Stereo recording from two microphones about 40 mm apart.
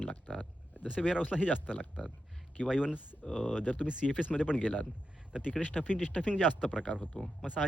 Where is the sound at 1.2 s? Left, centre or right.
Left.